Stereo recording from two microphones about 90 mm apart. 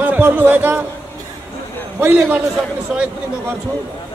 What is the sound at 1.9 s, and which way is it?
Speech, 20° right (ahead or behind).